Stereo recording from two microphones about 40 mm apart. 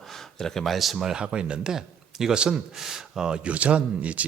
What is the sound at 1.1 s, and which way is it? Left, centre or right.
Speech, right.